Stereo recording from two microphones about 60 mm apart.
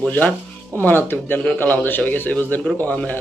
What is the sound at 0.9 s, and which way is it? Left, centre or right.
Speech, left.